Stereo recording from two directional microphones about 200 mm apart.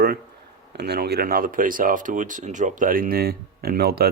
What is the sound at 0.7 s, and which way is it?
Speech, 55° right (ahead or behind).